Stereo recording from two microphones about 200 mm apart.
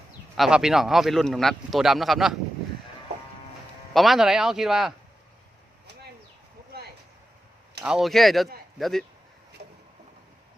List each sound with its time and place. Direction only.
0.3 s speech: centre (ahead or behind)
3.9 s speech: centre (ahead or behind)
7.8 s speech: 5° right (ahead or behind)
9.6 s a sound: 55° right (ahead or behind)